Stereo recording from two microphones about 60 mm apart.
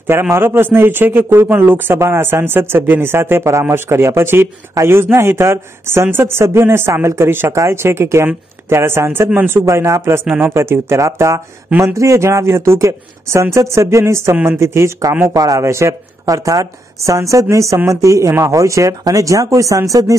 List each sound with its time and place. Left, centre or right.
0.0 s speech: right
7.5 s speech: right
15.3 s speech: right
15.6 s speech: right
15.9 s speech: right